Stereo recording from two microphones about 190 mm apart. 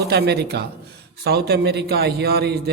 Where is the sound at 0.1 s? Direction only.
60° right (ahead or behind).